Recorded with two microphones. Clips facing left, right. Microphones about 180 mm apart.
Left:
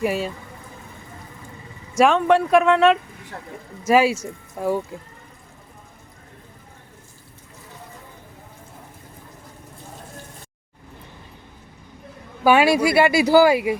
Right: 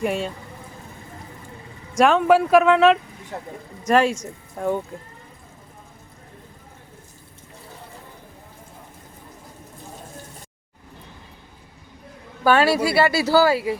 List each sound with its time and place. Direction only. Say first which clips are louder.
0.0 s speech: left 1 dB; 5° left (ahead or behind)
2.0 s speech: even; centre (ahead or behind)
3.3 s speech: right 4 dB; 20° right (ahead or behind)
3.8 s speech: left 1 dB; 5° left (ahead or behind)
12.4 s speech: left 2 dB; 10° left (ahead or behind)